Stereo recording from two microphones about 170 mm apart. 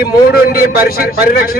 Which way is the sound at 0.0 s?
65° left (ahead or behind).